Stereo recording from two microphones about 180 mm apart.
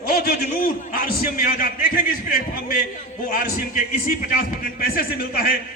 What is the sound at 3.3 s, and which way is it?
A man's voice, 55° left (ahead or behind).